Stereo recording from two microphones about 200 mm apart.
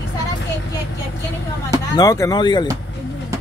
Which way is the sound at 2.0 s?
15° left (ahead or behind).